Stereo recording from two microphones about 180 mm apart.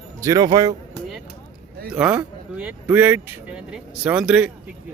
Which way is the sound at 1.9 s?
5° right (ahead or behind).